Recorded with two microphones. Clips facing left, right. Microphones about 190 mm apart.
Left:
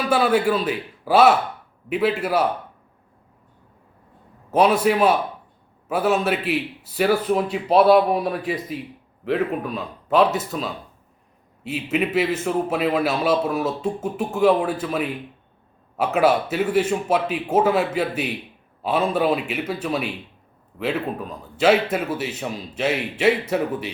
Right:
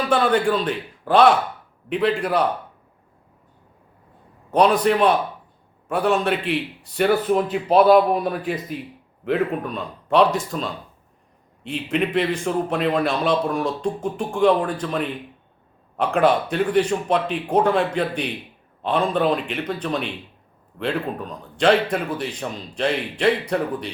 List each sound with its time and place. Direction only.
0.1 s a man's voice: 5° left (ahead or behind)
4.5 s a man's voice: 5° left (ahead or behind)